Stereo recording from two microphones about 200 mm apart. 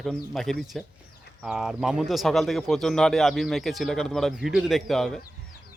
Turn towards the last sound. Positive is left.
turn(degrees=0)  # may be behind; listen again after turning